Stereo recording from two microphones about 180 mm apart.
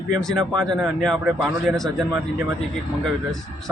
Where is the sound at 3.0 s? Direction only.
Centre (ahead or behind).